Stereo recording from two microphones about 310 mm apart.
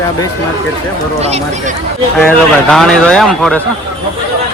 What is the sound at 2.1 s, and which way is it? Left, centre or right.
Speech, centre.